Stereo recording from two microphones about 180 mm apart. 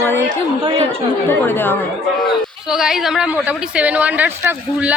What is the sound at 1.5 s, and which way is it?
Speech, 10° left (ahead or behind).